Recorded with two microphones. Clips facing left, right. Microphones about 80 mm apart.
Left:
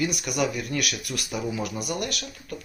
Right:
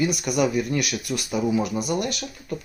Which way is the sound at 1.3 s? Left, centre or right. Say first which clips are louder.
Right 7 dB; centre.